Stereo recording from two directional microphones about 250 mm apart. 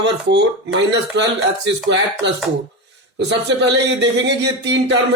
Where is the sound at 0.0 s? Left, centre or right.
Right.